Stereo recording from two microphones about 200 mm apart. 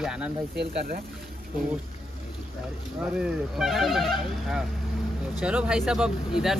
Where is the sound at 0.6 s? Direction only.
45° right (ahead or behind).